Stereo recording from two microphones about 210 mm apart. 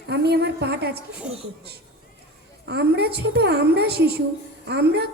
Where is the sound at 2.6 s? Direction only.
50° right (ahead or behind).